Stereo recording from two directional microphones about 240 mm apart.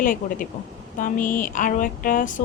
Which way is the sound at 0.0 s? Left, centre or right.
Left.